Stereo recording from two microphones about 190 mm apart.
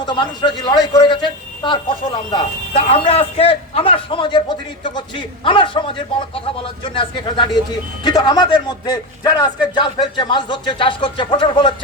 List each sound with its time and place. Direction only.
0.0 s speech: 25° left (ahead or behind)